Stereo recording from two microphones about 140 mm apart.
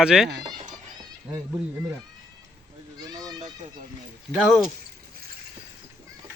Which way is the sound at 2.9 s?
25° right (ahead or behind).